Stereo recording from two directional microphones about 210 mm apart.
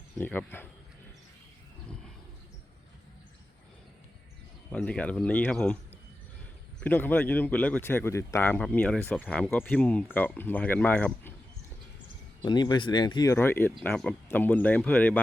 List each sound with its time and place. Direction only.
0.2 s speech: 10° left (ahead or behind)
4.7 s speech: 5° left (ahead or behind)
6.7 s speech: 10° left (ahead or behind)
12.4 s speech: 20° left (ahead or behind)